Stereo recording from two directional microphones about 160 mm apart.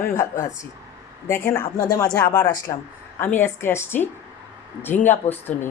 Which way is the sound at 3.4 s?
15° left (ahead or behind).